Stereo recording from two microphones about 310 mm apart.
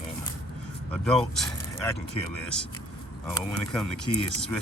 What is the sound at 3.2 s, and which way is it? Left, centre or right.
Speech, centre.